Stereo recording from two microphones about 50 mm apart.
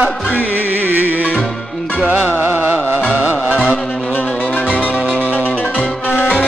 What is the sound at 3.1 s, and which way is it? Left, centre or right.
Music, right.